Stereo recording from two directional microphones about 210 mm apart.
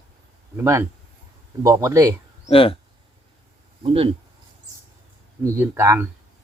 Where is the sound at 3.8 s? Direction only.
25° right (ahead or behind).